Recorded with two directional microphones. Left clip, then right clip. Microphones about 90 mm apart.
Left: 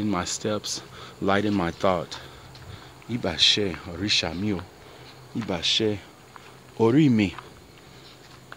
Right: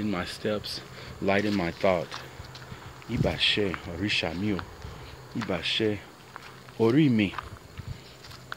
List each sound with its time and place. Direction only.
0.0 s speech: 90° left
3.1 s speech: 45° left (ahead or behind)
5.5 s speech: 60° left (ahead or behind)
6.8 s speech: 85° left